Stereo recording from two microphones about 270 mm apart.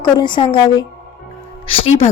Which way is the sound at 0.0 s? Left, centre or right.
Centre.